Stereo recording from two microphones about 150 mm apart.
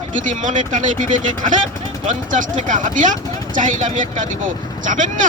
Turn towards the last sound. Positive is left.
turn(degrees=-55)  # may be behind; listen again after turning